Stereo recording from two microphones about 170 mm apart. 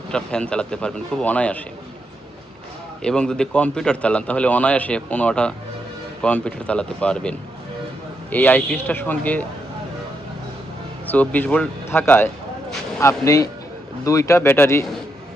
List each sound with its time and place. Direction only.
0.1 s speech: 5° left (ahead or behind)
3.0 s a man's voice: 5° left (ahead or behind)
11.0 s a man's voice: 10° left (ahead or behind)